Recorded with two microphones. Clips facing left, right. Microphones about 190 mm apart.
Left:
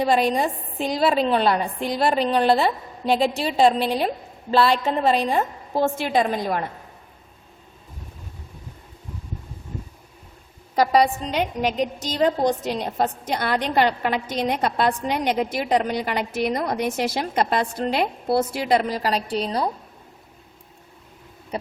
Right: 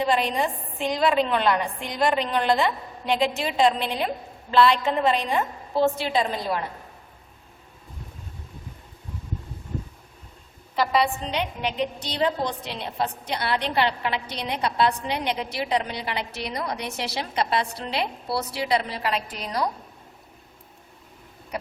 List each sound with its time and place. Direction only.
0.0 s a woman's voice: 40° left (ahead or behind)
10.8 s a woman's voice: 40° left (ahead or behind)
21.5 s a sound: 30° left (ahead or behind)